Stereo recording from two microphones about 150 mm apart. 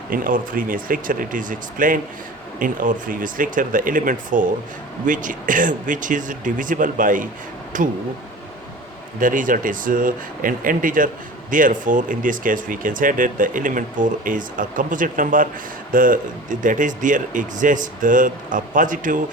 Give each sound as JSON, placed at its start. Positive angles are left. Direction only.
{"t": 0.1, "sound": "speech", "side_deg": -65}
{"t": 9.2, "sound": "speech", "side_deg": -65}